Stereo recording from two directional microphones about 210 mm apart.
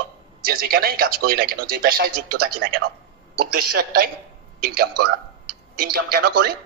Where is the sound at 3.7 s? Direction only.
45° right (ahead or behind).